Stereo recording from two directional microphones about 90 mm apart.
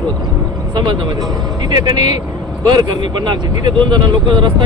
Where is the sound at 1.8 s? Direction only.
50° right (ahead or behind).